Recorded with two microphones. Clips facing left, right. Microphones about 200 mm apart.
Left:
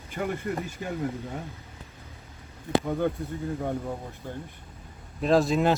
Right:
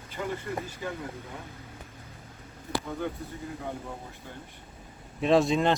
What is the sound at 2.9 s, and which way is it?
Speech, 50° left (ahead or behind).